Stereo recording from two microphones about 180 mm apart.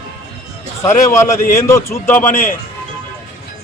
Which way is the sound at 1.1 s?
15° left (ahead or behind).